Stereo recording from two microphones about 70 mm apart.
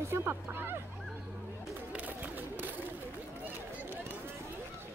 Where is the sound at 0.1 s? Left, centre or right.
Right.